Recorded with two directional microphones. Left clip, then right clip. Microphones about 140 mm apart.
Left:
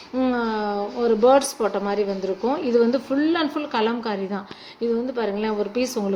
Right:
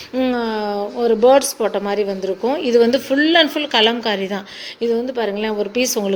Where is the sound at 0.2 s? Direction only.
10° right (ahead or behind).